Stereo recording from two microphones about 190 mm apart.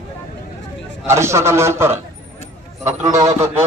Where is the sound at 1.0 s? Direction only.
15° right (ahead or behind).